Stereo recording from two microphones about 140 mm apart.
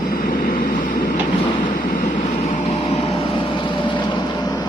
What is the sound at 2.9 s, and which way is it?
Vehicle, 40° left (ahead or behind).